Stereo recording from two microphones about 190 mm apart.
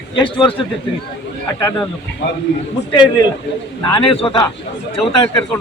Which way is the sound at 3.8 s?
25° left (ahead or behind).